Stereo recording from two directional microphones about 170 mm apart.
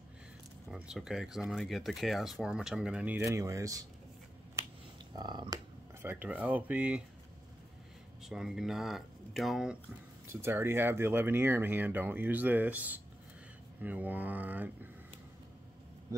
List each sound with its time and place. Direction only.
0.7 s speech: 5° right (ahead or behind); by 3.8 s 20° right (ahead or behind)
5.1 s speech: 25° right (ahead or behind)
6.0 s speech: 10° right (ahead or behind)
8.2 s speech: 5° right (ahead or behind)
10.2 s speech: 15° right (ahead or behind)